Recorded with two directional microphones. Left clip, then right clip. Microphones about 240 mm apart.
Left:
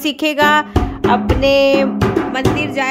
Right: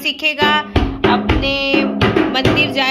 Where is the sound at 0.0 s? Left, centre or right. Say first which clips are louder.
Left 1 dB; left.